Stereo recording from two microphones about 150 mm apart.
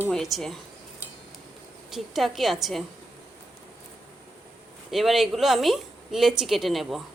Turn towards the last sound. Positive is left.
turn(degrees=0)  # may be behind; listen again after turning